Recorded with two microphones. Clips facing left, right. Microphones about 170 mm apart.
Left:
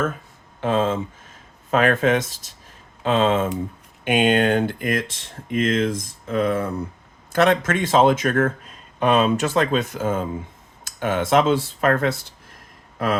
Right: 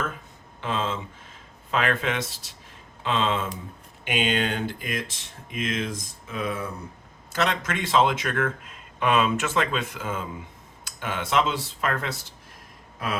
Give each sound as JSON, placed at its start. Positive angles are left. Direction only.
{"t": 0.6, "sound": "speech", "side_deg": 45}